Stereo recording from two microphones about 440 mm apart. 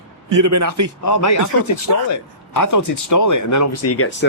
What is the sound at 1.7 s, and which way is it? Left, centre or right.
Speech, left.